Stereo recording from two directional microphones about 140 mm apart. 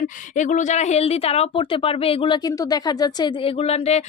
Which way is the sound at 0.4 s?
60° left (ahead or behind).